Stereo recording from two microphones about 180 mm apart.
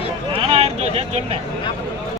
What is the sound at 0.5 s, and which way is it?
Vehicle, 35° right (ahead or behind).